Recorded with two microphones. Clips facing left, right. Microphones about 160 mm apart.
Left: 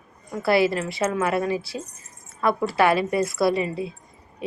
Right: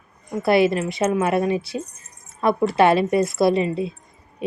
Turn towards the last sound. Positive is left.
turn(degrees=-25)  # may be behind; listen again after turning